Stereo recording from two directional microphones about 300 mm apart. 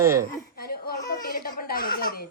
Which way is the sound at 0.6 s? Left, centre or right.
Left.